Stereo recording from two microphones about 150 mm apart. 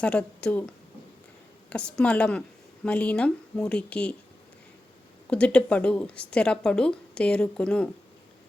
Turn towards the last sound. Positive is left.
turn(degrees=5)  # may be behind; listen again after turning